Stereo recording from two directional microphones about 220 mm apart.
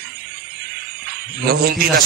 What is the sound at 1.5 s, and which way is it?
Speech, 45° right (ahead or behind).